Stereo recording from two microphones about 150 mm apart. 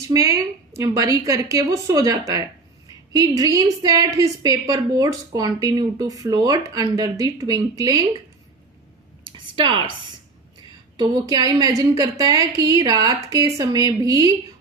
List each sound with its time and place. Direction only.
0.1 s a woman's voice: 20° right (ahead or behind)
9.2 s a sound: 30° right (ahead or behind)
10.9 s a woman's voice: 25° right (ahead or behind)